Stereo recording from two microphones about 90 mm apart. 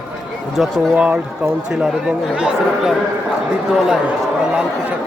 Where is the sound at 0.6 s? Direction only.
5° right (ahead or behind).